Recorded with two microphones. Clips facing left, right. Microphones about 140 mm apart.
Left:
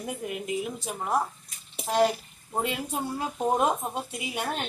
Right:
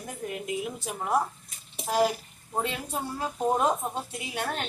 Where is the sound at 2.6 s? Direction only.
10° left (ahead or behind).